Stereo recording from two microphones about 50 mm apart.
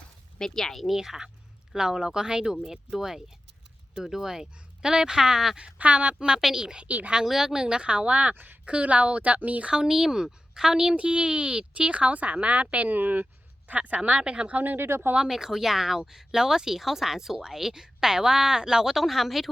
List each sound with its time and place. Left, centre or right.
0.3 s speech: centre
0.9 s speech: centre
5.5 s speech: right
7.3 s speech: centre; by 9.7 s right
9.7 s speech: centre; by 14.8 s right
14.8 s speech: right
15.1 s speech: centre